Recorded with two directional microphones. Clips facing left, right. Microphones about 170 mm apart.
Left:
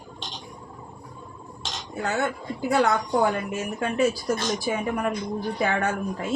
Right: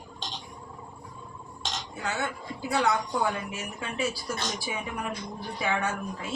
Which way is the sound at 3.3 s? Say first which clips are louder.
Left 7 dB; 50° left (ahead or behind).